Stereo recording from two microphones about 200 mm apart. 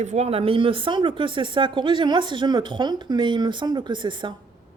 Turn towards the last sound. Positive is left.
turn(degrees=-25)  # may be behind; listen again after turning